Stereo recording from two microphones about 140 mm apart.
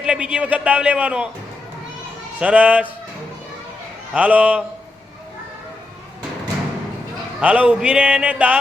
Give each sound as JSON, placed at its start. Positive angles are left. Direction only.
{"t": 0.0, "sound": "a man's voice", "side_deg": -5}
{"t": 2.4, "sound": "a man's voice", "side_deg": -10}
{"t": 4.1, "sound": "a man's voice", "side_deg": -10}
{"t": 7.4, "sound": "a man's voice", "side_deg": -10}